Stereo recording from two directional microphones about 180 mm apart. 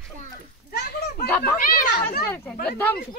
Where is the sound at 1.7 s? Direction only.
50° left (ahead or behind).